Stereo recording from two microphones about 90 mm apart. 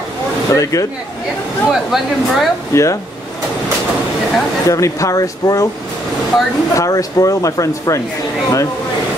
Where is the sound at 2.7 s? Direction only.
35° left (ahead or behind).